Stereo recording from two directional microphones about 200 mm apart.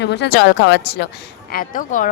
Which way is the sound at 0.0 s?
55° left (ahead or behind).